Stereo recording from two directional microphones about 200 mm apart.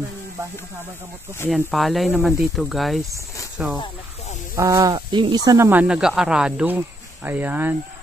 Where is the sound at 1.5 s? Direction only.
Centre (ahead or behind).